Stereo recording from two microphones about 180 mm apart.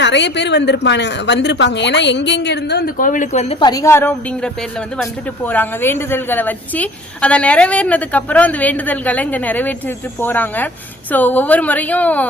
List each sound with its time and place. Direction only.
0.0 s a woman's voice: 75° left (ahead or behind); by 3.4 s 45° left (ahead or behind)
3.5 s a woman's voice: 20° left (ahead or behind)